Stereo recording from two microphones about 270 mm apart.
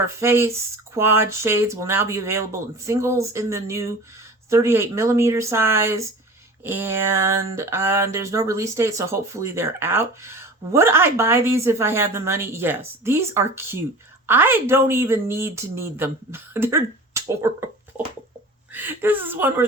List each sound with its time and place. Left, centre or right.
0.0 s speech: centre